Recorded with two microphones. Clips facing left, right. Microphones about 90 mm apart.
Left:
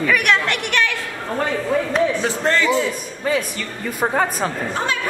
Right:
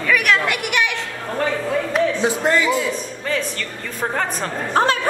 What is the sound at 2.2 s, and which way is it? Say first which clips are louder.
Speech: right 1 dB; 15° right (ahead or behind).